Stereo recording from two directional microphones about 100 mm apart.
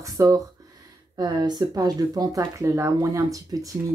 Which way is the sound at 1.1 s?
45° right (ahead or behind).